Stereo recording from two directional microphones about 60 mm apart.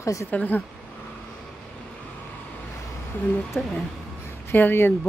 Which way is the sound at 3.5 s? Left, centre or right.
Left.